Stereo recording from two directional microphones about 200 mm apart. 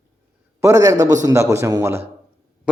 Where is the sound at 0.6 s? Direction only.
15° right (ahead or behind).